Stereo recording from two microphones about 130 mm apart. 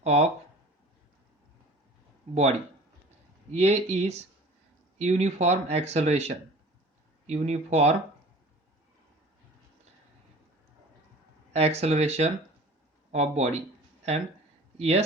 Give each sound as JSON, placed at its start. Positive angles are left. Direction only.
{"t": 0.0, "sound": "speech", "side_deg": -55}
{"t": 2.3, "sound": "speech", "side_deg": -55}
{"t": 11.5, "sound": "speech", "side_deg": -55}
{"t": 14.8, "sound": "speech", "side_deg": -55}